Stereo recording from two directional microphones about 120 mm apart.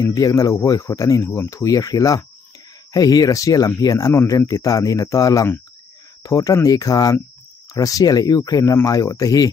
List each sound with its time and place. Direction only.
0.0 s speech: 25° left (ahead or behind)